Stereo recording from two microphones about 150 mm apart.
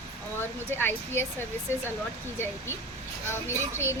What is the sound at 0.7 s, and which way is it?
Speech, 15° left (ahead or behind).